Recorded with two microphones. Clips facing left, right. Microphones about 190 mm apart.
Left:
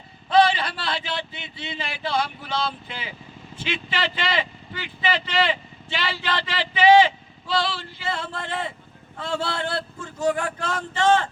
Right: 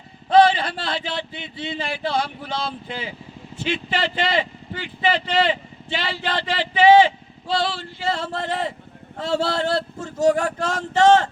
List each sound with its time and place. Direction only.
0.3 s a man's voice: 50° right (ahead or behind)
7.4 s male singing: 45° right (ahead or behind)
9.1 s a man's voice: 40° right (ahead or behind)